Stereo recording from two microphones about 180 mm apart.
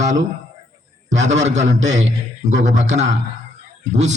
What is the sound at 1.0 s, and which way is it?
Speech, 90° right.